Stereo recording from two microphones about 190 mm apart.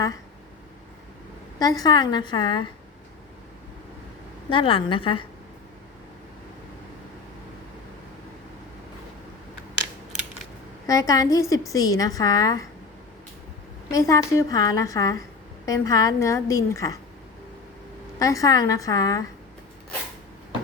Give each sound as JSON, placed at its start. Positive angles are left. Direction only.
{"t": 1.5, "sound": "a woman's voice", "side_deg": 20}
{"t": 4.4, "sound": "a woman's voice", "side_deg": 30}
{"t": 10.8, "sound": "a woman's voice", "side_deg": 20}
{"t": 13.9, "sound": "a woman's voice", "side_deg": 15}
{"t": 18.2, "sound": "a woman's voice", "side_deg": 15}